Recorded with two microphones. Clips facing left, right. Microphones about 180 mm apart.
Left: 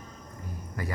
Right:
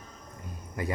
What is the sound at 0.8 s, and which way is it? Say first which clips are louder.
Speech: right 3 dB; 20° right (ahead or behind).